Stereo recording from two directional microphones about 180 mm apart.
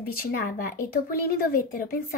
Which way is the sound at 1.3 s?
55° left (ahead or behind).